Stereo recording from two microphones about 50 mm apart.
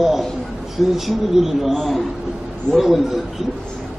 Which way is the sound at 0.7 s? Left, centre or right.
Centre.